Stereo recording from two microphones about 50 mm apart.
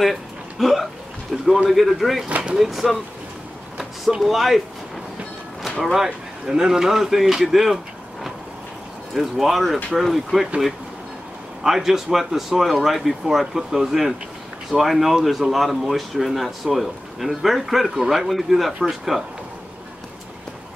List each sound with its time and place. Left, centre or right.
0.0 s speech: centre
2.2 s a sound: right
2.5 s speech: centre
3.7 s vehicle: centre
4.2 s speech: centre
5.8 s speech: centre
6.0 s speech: centre
11.6 s speech: centre